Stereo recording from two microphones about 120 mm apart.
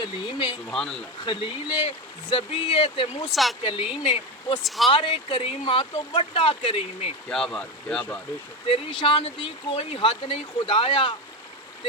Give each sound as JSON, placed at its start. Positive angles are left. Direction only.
{"t": 0.0, "sound": "speech", "side_deg": 40}
{"t": 0.7, "sound": "speech", "side_deg": 5}
{"t": 1.2, "sound": "speech", "side_deg": 40}
{"t": 7.3, "sound": "speech", "side_deg": 5}
{"t": 8.6, "sound": "speech", "side_deg": 45}